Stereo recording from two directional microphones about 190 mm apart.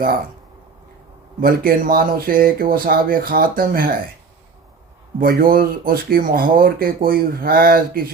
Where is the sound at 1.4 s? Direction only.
50° right (ahead or behind).